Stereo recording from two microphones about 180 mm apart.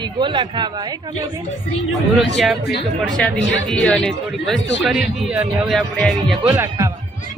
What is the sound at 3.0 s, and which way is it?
Speech, 5° left (ahead or behind).